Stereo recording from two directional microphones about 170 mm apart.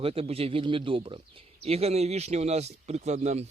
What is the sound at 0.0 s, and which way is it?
Speech, 35° right (ahead or behind).